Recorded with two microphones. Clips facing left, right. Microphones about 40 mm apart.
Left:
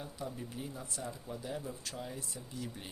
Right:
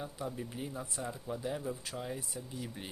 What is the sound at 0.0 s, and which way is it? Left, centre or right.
Speech, centre.